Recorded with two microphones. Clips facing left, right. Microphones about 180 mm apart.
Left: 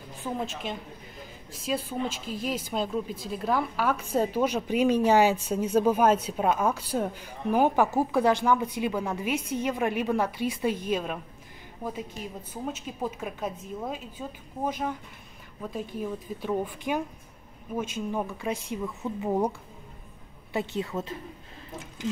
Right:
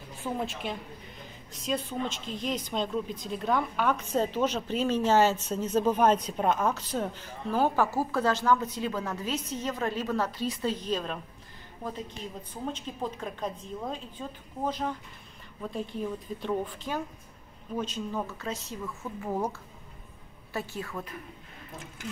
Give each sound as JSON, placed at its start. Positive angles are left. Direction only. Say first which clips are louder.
{"t": 1.5, "sound": "speech", "louder": "left 1 dB", "side_deg": 5}
{"t": 16.0, "sound": "speech", "louder": "left 1 dB", "side_deg": 10}
{"t": 20.5, "sound": "a woman's voice", "louder": "left 5 dB", "side_deg": 20}